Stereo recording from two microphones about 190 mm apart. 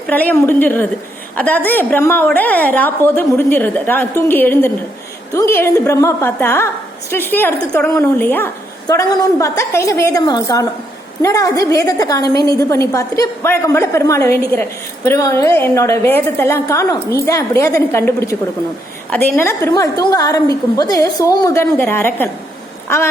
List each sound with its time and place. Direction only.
0.1 s a woman's voice: 10° left (ahead or behind)
19.1 s a woman's voice: 10° left (ahead or behind)